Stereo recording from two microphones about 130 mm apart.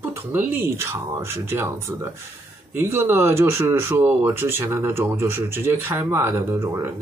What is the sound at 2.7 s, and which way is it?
Speech, 20° right (ahead or behind).